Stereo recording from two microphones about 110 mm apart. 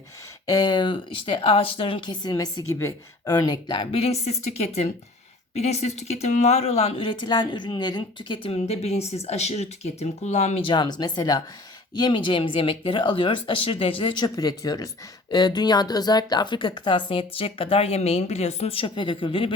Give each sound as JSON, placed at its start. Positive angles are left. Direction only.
{"t": 0.4, "sound": "speech", "side_deg": 35}
{"t": 3.9, "sound": "speech", "side_deg": 70}
{"t": 8.5, "sound": "speech", "side_deg": 70}
{"t": 10.6, "sound": "speech", "side_deg": 45}